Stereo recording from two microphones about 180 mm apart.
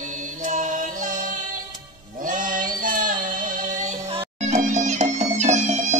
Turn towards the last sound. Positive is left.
turn(degrees=-40)  # may be behind; listen again after turning